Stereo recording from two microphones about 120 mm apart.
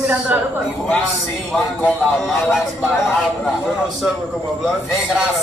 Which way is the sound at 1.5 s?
Centre (ahead or behind).